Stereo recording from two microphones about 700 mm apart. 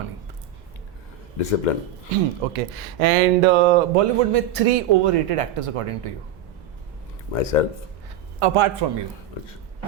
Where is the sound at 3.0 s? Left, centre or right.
Right.